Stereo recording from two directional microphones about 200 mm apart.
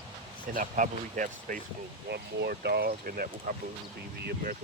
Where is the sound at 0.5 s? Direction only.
40° right (ahead or behind).